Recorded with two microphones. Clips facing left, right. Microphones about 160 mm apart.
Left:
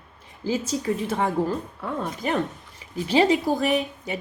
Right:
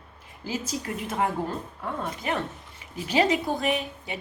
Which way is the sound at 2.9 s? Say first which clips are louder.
Left 4 dB; 30° left (ahead or behind).